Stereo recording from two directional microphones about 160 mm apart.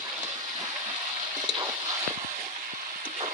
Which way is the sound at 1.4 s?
25° right (ahead or behind).